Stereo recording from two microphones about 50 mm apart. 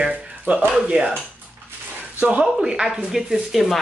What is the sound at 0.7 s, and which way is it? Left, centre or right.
Speech, centre.